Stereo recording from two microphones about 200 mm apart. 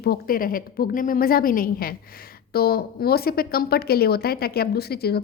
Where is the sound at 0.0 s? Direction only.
50° left (ahead or behind).